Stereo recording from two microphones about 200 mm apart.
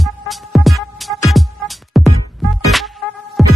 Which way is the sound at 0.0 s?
Centre (ahead or behind).